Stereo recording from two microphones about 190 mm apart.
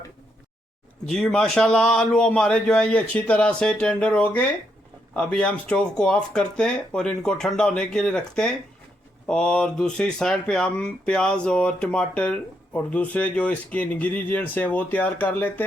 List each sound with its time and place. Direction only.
1.0 s a man's voice: 5° left (ahead or behind)